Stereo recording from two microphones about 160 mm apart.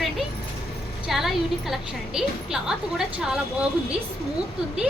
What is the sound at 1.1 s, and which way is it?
A woman's voice, centre (ahead or behind).